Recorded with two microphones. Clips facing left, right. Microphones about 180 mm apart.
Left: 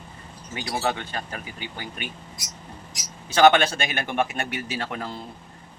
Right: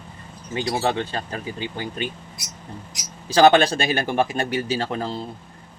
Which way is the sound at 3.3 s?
35° right (ahead or behind).